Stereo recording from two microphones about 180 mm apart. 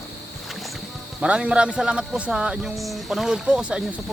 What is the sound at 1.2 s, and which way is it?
Speech, 5° right (ahead or behind).